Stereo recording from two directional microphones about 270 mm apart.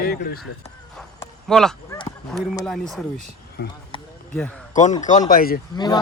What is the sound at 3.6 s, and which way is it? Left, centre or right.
Speech, left.